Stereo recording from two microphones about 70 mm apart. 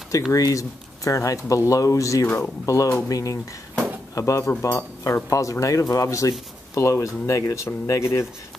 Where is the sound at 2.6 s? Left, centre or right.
Left.